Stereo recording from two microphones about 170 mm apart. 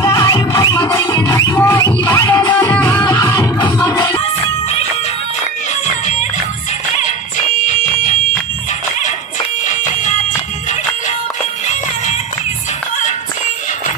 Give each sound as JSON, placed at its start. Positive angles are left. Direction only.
{"t": 0.0, "sound": "music", "side_deg": 20}
{"t": 7.6, "sound": "fire alarm", "side_deg": 45}
{"t": 11.6, "sound": "music", "side_deg": 45}